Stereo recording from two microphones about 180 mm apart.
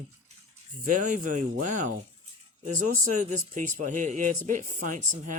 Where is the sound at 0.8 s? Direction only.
45° right (ahead or behind).